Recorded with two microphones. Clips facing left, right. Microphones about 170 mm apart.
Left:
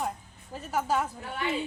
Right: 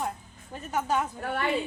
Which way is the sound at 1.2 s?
60° right (ahead or behind).